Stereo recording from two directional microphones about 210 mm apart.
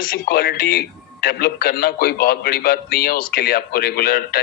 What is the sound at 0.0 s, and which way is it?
A man's voice, 45° left (ahead or behind).